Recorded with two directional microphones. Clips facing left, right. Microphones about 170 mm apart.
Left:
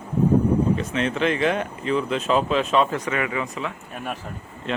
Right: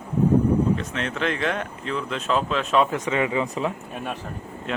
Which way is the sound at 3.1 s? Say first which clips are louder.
Right 2 dB; 25° right (ahead or behind).